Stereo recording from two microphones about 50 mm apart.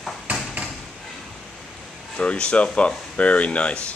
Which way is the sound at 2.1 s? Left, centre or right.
Left.